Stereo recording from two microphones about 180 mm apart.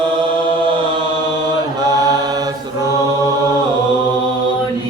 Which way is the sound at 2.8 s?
20° right (ahead or behind).